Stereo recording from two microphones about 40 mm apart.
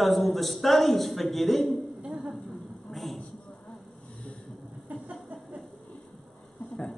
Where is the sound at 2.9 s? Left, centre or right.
Centre.